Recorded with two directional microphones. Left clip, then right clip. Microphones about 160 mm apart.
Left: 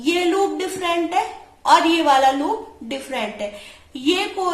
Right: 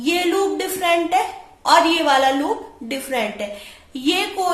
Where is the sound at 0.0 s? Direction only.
30° right (ahead or behind).